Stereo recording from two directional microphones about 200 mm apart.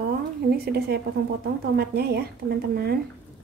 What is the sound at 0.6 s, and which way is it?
A woman's voice, 50° right (ahead or behind).